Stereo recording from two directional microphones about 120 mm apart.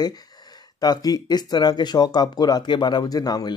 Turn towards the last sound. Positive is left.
turn(degrees=35)  # may be behind; listen again after turning